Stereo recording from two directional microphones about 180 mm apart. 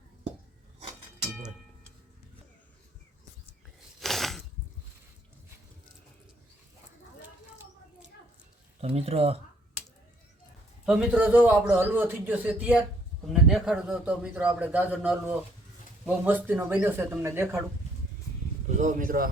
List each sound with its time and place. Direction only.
4.0 s a sound: centre (ahead or behind)
8.8 s speech: 35° right (ahead or behind)
10.8 s a man's voice: 10° right (ahead or behind)
18.8 s speech: 45° right (ahead or behind)